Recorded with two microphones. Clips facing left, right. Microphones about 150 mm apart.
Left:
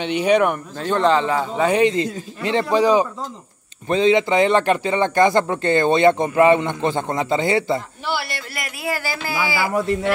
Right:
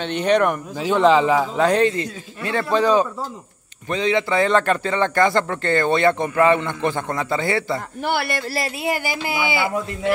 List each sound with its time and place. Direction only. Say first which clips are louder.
0.0 s a man's voice: left 1 dB; 10° left (ahead or behind)
0.7 s a man's voice: right 3 dB; 5° right (ahead or behind)
1.9 s a man's voice: left 3 dB; 20° left (ahead or behind)
3.9 s a man's voice: left 4 dB; 25° left (ahead or behind)
8.0 s speech: right 3 dB; 55° right (ahead or behind)
8.5 s speech: right 1 dB; 20° right (ahead or behind)